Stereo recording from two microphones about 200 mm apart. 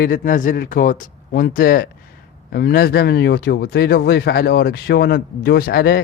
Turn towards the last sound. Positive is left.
turn(degrees=50)  # may be behind; listen again after turning